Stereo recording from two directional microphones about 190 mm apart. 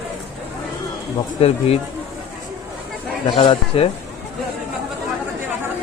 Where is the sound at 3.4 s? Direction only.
30° left (ahead or behind).